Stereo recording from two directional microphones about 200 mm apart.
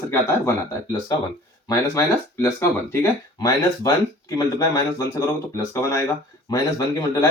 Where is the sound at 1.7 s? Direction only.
15° left (ahead or behind).